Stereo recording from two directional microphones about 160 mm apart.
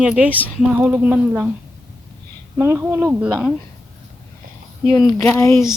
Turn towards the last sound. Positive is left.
turn(degrees=20)  # may be behind; listen again after turning